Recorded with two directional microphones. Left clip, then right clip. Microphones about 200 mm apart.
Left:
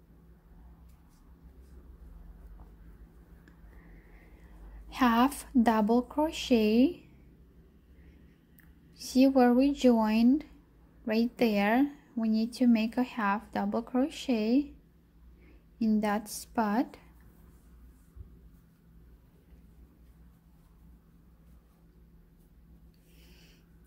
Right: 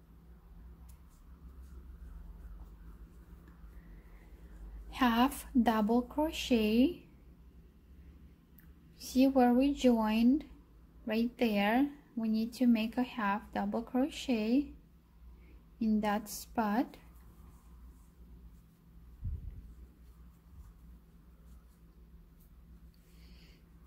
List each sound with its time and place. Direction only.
4.8 s a woman's voice: 15° left (ahead or behind)
8.9 s a woman's voice: 15° left (ahead or behind)
15.8 s a woman's voice: 15° left (ahead or behind)